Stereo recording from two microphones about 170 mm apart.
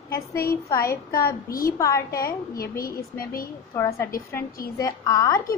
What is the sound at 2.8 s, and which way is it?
Speech, 60° left (ahead or behind).